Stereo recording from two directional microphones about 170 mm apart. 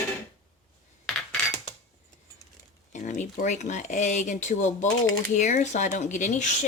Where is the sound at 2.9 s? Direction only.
45° left (ahead or behind).